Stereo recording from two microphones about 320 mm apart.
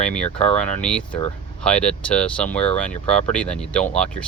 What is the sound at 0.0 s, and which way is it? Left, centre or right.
Speech, centre.